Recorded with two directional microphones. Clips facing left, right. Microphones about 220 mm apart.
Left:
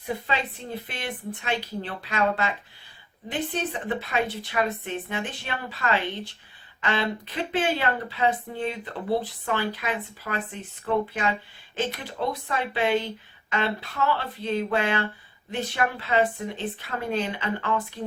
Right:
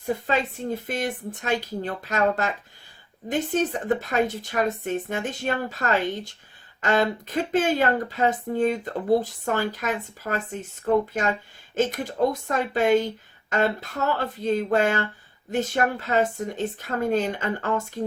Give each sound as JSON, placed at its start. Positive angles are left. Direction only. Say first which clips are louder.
{"t": 0.0, "sound": "speech", "louder": "right 4 dB", "side_deg": -45}